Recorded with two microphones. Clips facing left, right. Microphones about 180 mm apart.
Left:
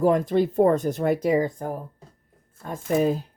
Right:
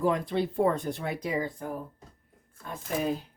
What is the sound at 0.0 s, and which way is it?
Speech, 45° left (ahead or behind).